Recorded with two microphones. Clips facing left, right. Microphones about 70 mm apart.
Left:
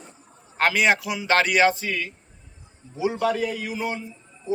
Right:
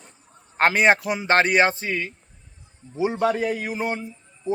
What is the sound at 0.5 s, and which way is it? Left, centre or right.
A man's voice, right.